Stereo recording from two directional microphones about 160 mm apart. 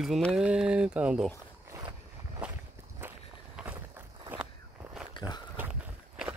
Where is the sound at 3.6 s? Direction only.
10° right (ahead or behind).